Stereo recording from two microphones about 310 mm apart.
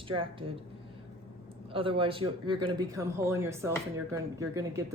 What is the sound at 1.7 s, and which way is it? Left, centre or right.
Speech, centre.